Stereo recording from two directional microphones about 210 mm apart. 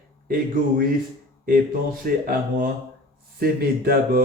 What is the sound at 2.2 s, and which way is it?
Speech, 45° right (ahead or behind).